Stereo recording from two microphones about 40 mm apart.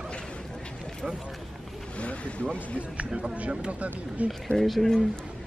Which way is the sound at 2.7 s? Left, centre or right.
Right.